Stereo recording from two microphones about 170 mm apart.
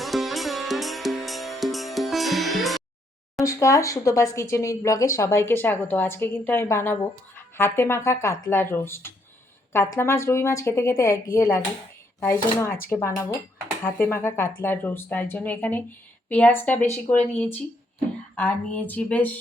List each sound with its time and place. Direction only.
0.0 s music: centre (ahead or behind)
3.4 s speech: 20° left (ahead or behind)